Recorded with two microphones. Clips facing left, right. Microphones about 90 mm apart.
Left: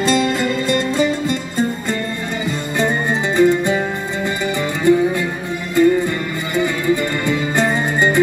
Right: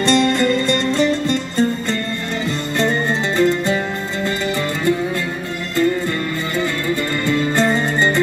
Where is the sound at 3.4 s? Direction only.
10° left (ahead or behind).